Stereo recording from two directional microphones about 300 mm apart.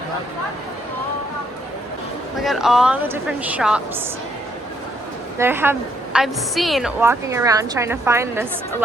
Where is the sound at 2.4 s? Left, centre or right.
Centre.